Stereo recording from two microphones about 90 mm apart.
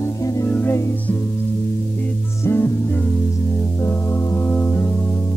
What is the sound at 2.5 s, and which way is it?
Music, 25° left (ahead or behind).